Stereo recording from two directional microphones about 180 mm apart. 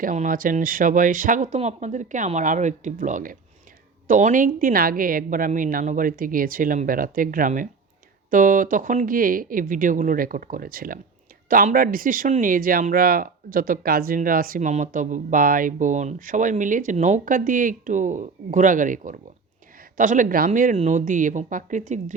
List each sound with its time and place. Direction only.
0.0 s speech: 50° right (ahead or behind)